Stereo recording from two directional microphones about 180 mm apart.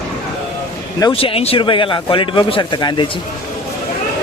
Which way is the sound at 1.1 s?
30° left (ahead or behind).